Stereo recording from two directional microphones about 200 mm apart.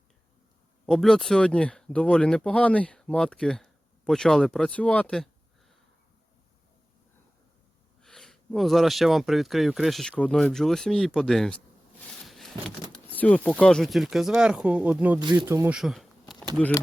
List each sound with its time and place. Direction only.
0.9 s speech: centre (ahead or behind)
8.0 s speech: centre (ahead or behind)
12.2 s a sound: centre (ahead or behind)
13.1 s speech: 10° left (ahead or behind); by 15.2 s 10° right (ahead or behind)
15.2 s speech: 25° right (ahead or behind)
15.7 s speech: centre (ahead or behind)